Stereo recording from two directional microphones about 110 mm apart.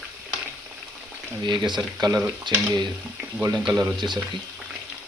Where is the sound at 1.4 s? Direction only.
40° right (ahead or behind).